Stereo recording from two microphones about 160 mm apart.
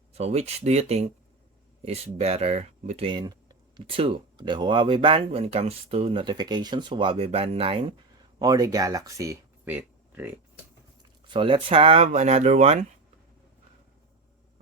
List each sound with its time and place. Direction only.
0.1 s speech: 40° right (ahead or behind)
8.4 s speech: 25° right (ahead or behind)
11.3 s speech: 30° right (ahead or behind); by 12.8 s 45° right (ahead or behind)